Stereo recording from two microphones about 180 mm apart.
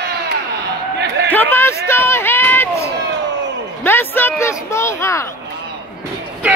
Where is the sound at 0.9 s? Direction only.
70° right (ahead or behind).